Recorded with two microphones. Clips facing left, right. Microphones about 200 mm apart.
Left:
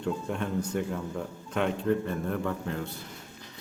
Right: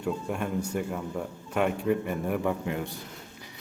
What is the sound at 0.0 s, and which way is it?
A man's voice, 10° right (ahead or behind).